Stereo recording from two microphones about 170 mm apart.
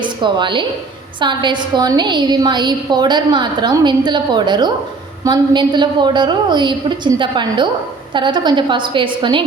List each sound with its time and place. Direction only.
0.0 s a woman's voice: 25° right (ahead or behind)